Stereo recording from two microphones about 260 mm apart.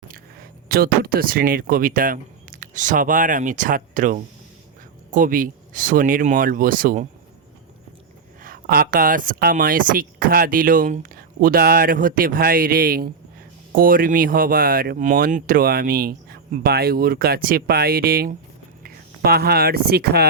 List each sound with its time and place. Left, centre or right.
0.7 s speech: right
8.4 s speech: right